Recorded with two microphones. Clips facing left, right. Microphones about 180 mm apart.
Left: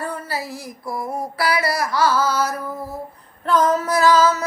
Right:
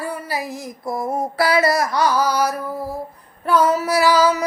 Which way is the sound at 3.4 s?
10° right (ahead or behind).